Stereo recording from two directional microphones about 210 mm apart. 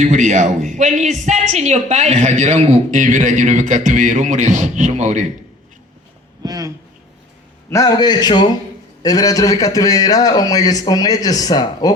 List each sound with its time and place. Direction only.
0.0 s a woman's voice: 35° right (ahead or behind)
6.4 s a sound: 15° right (ahead or behind)
7.7 s a man's voice: 15° left (ahead or behind)